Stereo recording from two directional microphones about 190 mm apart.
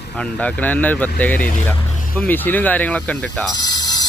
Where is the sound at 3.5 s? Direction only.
20° left (ahead or behind).